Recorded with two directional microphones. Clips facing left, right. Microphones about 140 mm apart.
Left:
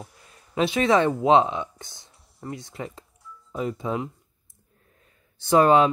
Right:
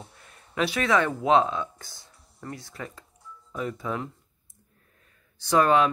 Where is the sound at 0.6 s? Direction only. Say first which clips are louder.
Left 4 dB; 25° left (ahead or behind).